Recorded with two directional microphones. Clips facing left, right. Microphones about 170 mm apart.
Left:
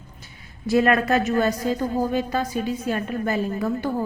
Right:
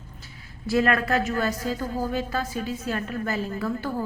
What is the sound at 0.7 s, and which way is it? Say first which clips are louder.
A woman's voice: left 4 dB; 20° left (ahead or behind).